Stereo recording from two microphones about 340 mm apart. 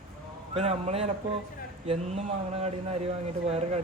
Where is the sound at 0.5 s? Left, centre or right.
Centre.